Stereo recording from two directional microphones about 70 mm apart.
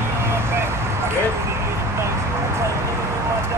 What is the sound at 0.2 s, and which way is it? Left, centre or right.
Vehicle, right.